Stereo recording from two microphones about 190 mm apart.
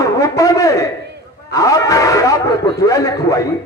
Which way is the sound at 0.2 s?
20° left (ahead or behind).